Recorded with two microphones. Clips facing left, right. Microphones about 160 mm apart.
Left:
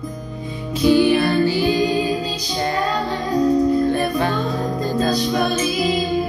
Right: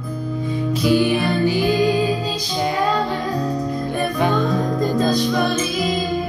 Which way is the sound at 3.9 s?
15° right (ahead or behind).